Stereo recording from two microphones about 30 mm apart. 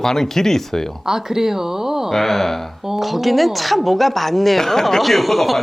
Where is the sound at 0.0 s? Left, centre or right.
Centre.